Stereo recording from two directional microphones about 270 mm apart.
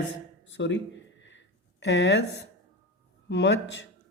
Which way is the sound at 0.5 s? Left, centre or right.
Left.